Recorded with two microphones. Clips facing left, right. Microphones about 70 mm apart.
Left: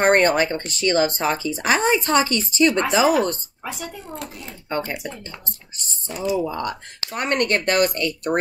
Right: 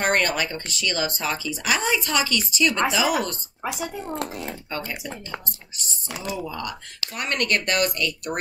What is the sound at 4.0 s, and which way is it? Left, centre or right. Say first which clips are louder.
Speech: right 4 dB; right.